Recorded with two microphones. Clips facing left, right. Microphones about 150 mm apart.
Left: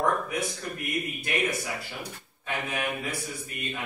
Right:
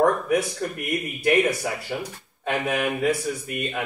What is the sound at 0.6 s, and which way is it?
A man's voice, 70° right (ahead or behind).